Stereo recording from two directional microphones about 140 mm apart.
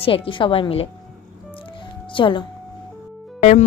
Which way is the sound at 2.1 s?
35° left (ahead or behind).